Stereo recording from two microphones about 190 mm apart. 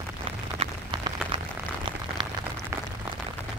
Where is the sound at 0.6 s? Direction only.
30° right (ahead or behind).